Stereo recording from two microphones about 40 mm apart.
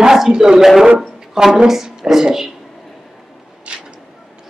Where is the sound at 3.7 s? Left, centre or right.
Right.